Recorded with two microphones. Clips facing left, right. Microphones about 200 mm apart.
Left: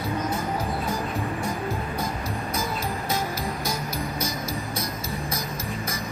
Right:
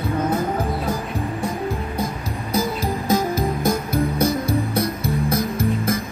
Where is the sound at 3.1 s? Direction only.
55° right (ahead or behind).